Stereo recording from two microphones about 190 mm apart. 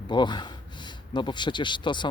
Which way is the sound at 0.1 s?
25° left (ahead or behind).